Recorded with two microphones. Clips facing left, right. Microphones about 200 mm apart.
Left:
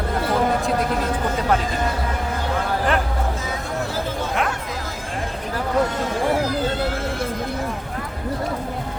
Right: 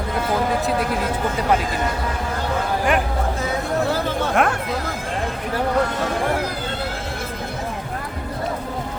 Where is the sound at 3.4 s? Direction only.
60° right (ahead or behind).